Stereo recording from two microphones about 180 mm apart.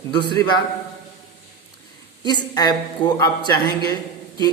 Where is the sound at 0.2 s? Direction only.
25° left (ahead or behind).